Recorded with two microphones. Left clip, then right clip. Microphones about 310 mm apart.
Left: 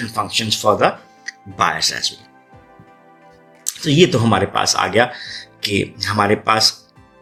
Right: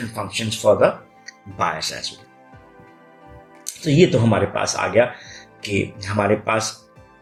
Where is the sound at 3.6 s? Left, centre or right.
Left.